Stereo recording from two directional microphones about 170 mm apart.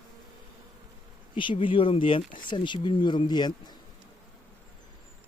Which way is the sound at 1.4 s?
30° left (ahead or behind).